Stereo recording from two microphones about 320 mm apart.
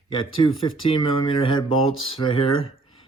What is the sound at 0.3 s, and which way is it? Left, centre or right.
Speech, centre.